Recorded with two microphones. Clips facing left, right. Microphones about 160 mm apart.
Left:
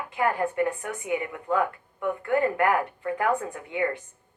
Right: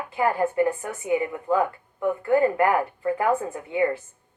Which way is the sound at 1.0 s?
35° right (ahead or behind).